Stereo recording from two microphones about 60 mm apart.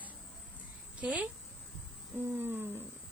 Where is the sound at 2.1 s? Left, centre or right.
Right.